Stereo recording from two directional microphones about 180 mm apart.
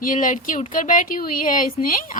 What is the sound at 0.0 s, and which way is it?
A woman's voice, 45° left (ahead or behind).